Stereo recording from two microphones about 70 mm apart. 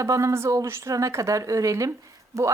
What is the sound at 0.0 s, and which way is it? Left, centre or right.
Speech, right.